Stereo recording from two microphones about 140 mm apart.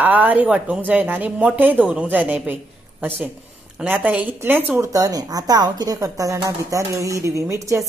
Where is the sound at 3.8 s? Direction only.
10° right (ahead or behind).